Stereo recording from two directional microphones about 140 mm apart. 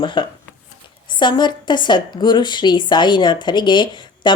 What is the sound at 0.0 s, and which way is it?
A woman's voice, 35° left (ahead or behind).